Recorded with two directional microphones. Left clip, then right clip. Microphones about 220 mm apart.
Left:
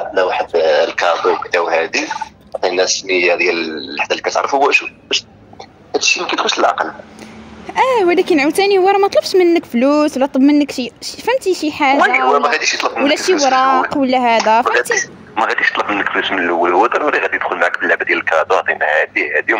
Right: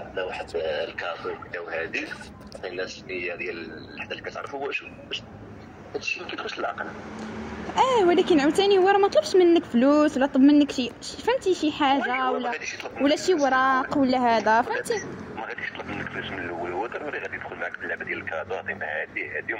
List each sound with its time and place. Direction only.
0.1 s a man's voice: 55° left (ahead or behind)